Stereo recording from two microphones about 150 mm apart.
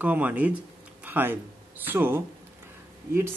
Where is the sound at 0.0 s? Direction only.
10° right (ahead or behind).